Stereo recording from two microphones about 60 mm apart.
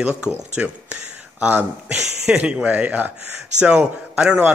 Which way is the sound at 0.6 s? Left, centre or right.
Right.